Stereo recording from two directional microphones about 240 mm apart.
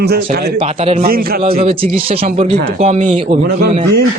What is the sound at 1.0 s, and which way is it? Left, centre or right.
Speech, right.